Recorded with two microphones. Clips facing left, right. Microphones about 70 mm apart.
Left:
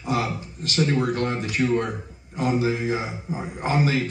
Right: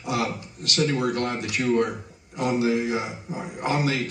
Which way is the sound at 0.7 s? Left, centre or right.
Left.